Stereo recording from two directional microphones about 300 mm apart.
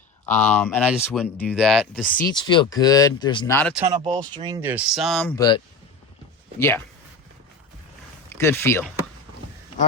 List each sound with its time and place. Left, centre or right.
0.3 s speech: centre
2.0 s speech: left
2.3 s speech: centre
4.2 s speech: centre
6.6 s speech: centre
8.3 s speech: centre